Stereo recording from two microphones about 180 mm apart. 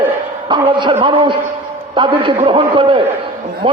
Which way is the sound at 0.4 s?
25° right (ahead or behind).